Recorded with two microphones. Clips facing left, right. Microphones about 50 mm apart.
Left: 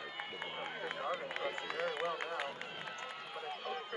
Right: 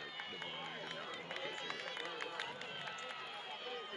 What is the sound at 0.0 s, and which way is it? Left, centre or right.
Run, centre.